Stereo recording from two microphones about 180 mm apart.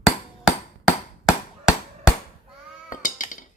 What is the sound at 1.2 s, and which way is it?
Chop, 5° right (ahead or behind).